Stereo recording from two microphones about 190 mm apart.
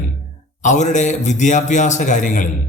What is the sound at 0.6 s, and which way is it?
Speech, 40° left (ahead or behind).